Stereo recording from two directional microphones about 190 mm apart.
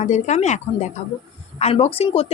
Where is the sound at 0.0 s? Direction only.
35° left (ahead or behind).